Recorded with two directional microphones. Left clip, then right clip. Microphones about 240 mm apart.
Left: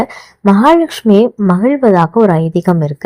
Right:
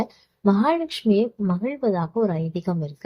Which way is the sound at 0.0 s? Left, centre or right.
Left.